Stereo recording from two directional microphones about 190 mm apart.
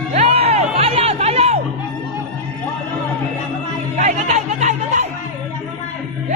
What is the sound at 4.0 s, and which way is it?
Music, 35° right (ahead or behind).